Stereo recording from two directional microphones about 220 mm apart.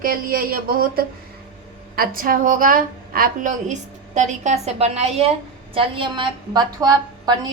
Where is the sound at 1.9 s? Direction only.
40° right (ahead or behind).